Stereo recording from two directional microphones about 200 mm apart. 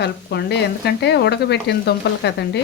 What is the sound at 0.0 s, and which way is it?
Speech, 55° left (ahead or behind).